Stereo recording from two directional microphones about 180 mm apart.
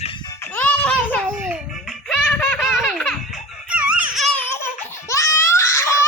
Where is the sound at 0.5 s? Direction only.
5° left (ahead or behind).